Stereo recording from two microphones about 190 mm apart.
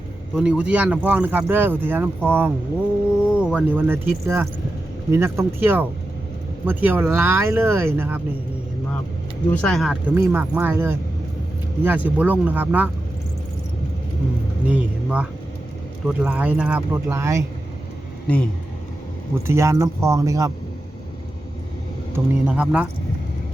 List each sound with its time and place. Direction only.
0.3 s speech: 5° right (ahead or behind)
9.5 s speech: 5° left (ahead or behind)
14.7 s speech: 5° right (ahead or behind)
19.5 s speech: 15° right (ahead or behind)
22.1 s speech: 10° right (ahead or behind)